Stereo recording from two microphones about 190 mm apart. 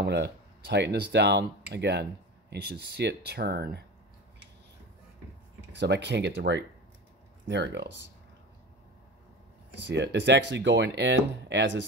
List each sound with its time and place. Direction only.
0.0 s speech: 60° right (ahead or behind)
5.7 s speech: 65° right (ahead or behind)
9.8 s speech: 65° right (ahead or behind)